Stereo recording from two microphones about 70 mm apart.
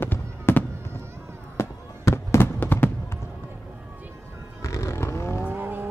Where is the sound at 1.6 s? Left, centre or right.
Left.